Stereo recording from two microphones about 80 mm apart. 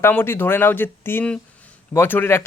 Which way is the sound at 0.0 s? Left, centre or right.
Left.